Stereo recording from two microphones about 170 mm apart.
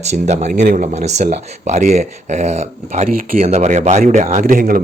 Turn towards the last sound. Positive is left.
turn(degrees=-55)  # may be behind; listen again after turning